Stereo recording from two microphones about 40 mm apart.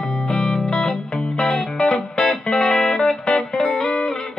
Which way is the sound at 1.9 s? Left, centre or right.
Centre.